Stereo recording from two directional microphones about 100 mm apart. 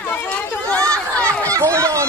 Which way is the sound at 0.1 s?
15° left (ahead or behind).